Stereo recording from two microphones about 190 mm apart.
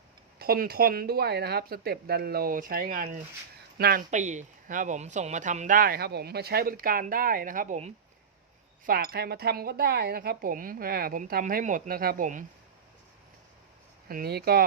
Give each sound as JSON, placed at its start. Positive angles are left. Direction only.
{"t": 0.3, "sound": "speech", "side_deg": -55}
{"t": 4.1, "sound": "speech", "side_deg": -40}
{"t": 8.9, "sound": "speech", "side_deg": -55}
{"t": 14.1, "sound": "speech", "side_deg": -50}